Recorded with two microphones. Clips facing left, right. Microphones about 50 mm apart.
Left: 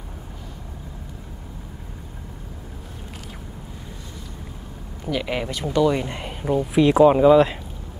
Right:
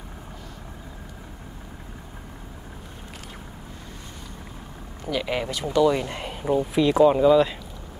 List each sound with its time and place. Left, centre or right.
5.0 s speech: centre